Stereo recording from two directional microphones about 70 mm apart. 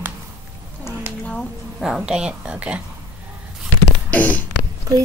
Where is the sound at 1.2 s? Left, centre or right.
Centre.